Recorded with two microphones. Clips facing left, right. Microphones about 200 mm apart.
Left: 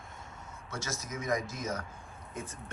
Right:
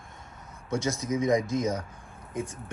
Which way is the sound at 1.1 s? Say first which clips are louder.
Right 9 dB; 15° right (ahead or behind).